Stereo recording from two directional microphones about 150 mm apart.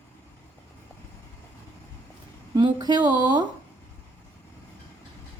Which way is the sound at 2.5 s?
25° right (ahead or behind).